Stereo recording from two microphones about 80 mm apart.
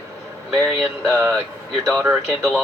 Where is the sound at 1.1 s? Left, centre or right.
Right.